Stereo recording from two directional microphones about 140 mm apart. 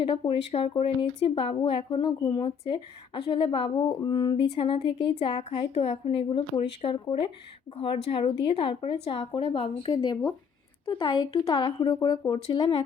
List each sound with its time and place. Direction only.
0.0 s speech: 40° left (ahead or behind)